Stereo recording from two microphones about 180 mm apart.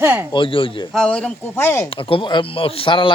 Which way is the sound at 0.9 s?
5° left (ahead or behind).